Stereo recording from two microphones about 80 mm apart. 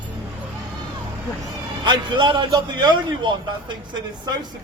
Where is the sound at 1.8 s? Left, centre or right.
Right.